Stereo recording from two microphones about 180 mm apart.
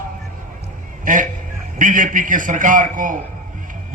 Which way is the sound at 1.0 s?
45° right (ahead or behind).